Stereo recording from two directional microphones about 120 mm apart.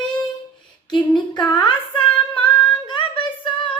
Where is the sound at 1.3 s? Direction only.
40° left (ahead or behind).